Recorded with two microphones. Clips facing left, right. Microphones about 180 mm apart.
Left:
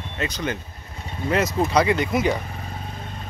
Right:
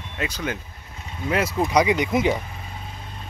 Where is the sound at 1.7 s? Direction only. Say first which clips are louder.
Right 2 dB; 15° right (ahead or behind).